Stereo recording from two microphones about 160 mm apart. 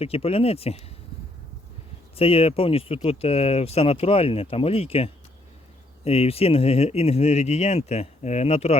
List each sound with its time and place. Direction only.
0.0 s speech: 35° left (ahead or behind)
2.1 s speech: 35° left (ahead or behind)